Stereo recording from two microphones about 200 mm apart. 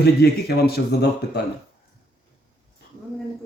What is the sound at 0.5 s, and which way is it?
Speech, 55° left (ahead or behind).